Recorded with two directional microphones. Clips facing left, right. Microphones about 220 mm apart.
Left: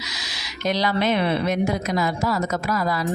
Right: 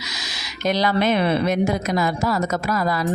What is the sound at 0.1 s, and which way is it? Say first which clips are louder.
Speech: right 2 dB; 45° right (ahead or behind).